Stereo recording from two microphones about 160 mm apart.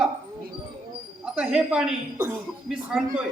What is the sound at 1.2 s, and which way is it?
Speech, 5° right (ahead or behind).